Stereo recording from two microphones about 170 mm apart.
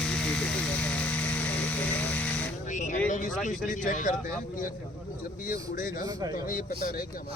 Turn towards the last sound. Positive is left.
turn(degrees=60)  # may be behind; listen again after turning